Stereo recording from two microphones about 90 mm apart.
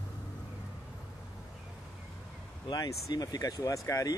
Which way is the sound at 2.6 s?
50° left (ahead or behind).